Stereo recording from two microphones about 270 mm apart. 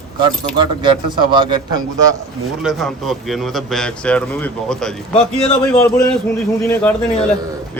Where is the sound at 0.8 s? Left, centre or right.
Centre.